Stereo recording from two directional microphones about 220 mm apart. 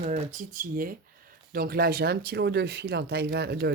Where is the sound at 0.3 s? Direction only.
35° right (ahead or behind).